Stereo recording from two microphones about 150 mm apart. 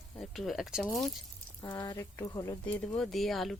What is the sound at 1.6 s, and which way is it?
Speech, 15° left (ahead or behind).